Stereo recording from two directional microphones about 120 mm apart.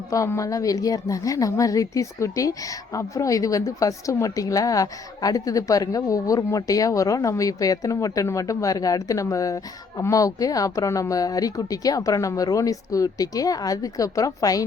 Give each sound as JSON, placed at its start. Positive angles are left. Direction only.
{"t": 0.1, "sound": "a woman's voice", "side_deg": 25}